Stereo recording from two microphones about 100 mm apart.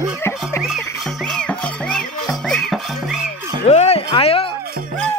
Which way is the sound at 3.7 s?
90° left.